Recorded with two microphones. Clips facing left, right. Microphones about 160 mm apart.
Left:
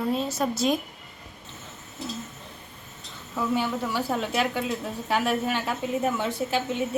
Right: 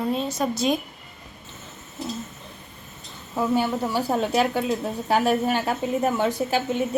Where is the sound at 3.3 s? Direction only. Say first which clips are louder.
Right 4 dB; 35° right (ahead or behind).